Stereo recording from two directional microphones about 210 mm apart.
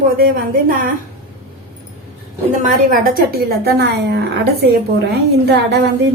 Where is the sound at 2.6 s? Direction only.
40° right (ahead or behind).